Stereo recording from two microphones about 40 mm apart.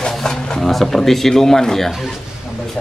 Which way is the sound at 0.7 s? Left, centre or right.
Centre.